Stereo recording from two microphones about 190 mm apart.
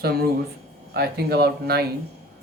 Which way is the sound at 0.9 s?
55° right (ahead or behind).